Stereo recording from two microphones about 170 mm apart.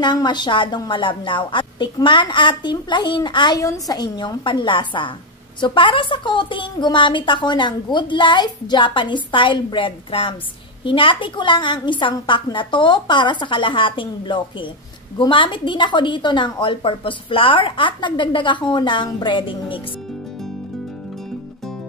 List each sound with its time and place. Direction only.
0.0 s a woman's voice: 25° left (ahead or behind)